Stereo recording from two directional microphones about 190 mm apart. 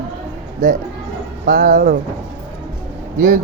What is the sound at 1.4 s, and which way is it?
Speech, 55° right (ahead or behind).